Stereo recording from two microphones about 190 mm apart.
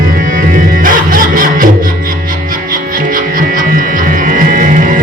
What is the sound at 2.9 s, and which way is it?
Music, 45° right (ahead or behind).